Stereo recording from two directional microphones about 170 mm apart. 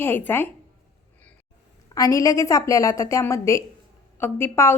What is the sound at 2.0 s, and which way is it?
A woman's voice, 20° left (ahead or behind).